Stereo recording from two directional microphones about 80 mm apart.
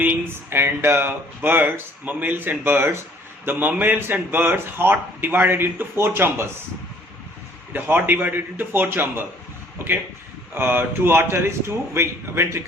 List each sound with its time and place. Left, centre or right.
0.0 s speech: right
7.7 s a man's voice: right